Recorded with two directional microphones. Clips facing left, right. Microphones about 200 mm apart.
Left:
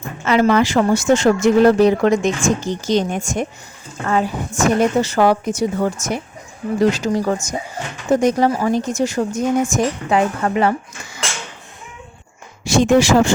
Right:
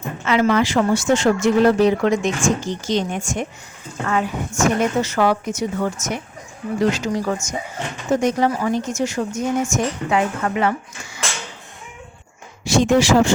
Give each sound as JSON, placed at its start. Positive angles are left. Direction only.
{"t": 0.3, "sound": "speech", "side_deg": 40}
{"t": 12.6, "sound": "speech", "side_deg": 50}